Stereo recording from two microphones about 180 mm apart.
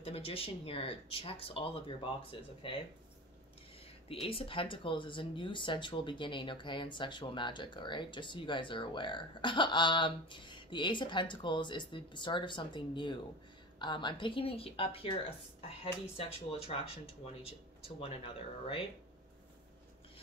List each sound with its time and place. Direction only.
0.0 s speech: 30° left (ahead or behind)
4.1 s speech: 30° left (ahead or behind)